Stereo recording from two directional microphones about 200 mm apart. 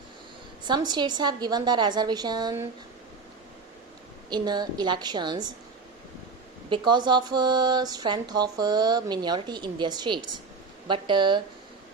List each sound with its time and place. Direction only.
0.6 s speech: 20° right (ahead or behind)
4.3 s speech: 20° right (ahead or behind)
6.7 s speech: 20° right (ahead or behind)